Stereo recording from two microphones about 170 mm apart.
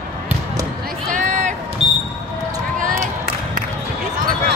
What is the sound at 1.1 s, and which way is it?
Run, 50° right (ahead or behind).